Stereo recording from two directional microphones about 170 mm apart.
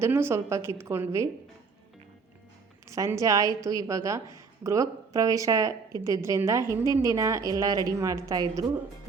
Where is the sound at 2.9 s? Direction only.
20° right (ahead or behind).